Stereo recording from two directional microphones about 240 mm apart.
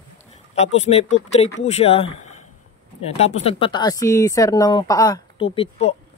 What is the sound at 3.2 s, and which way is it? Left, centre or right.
Speech, left.